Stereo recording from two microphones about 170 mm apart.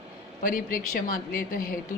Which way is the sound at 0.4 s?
55° left (ahead or behind).